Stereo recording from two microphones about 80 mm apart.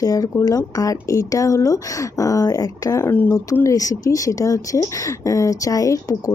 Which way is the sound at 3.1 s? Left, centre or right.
Left.